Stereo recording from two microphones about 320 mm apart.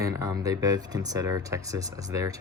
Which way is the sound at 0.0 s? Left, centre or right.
Centre.